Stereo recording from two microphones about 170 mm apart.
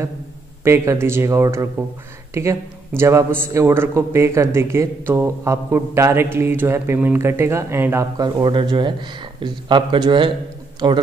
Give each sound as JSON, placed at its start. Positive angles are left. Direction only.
{"t": 0.7, "sound": "a man's voice", "side_deg": -15}
{"t": 3.0, "sound": "a man's voice", "side_deg": -15}